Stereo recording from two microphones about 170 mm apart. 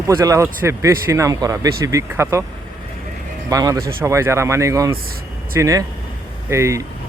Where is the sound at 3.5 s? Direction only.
20° right (ahead or behind).